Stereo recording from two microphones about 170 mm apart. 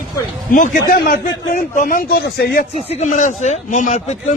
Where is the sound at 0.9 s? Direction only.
65° left (ahead or behind).